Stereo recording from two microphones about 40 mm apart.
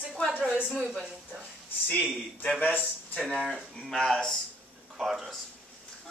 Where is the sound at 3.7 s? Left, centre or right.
Centre.